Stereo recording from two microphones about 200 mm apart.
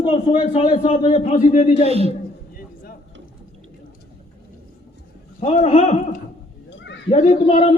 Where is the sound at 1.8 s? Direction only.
30° right (ahead or behind).